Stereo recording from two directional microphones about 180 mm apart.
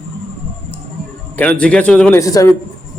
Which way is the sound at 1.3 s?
5° left (ahead or behind).